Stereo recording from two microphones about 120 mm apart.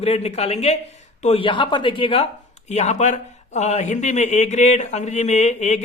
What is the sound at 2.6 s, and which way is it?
Speech, 70° left (ahead or behind).